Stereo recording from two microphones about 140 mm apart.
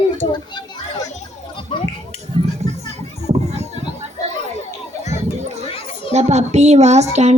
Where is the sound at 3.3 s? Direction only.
50° right (ahead or behind).